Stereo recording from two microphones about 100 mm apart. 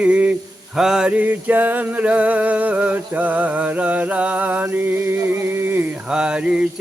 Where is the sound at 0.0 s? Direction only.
15° right (ahead or behind).